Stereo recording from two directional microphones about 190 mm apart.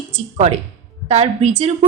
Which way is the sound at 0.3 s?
35° right (ahead or behind).